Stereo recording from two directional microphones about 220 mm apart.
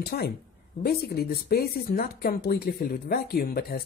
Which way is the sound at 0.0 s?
45° left (ahead or behind).